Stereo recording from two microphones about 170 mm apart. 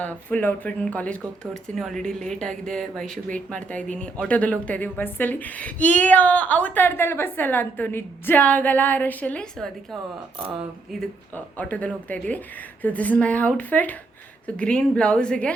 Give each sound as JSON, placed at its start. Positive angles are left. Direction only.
{"t": 0.0, "sound": "a woman's voice", "side_deg": 10}
{"t": 11.0, "sound": "speech", "side_deg": 5}